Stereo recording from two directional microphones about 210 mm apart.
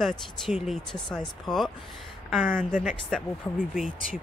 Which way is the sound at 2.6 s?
40° left (ahead or behind).